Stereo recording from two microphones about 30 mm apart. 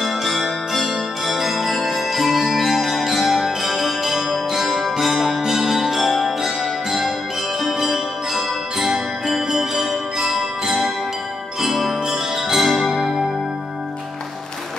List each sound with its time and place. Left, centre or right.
0.0 s music: centre
11.6 s jingle bell: centre
12.5 s music: centre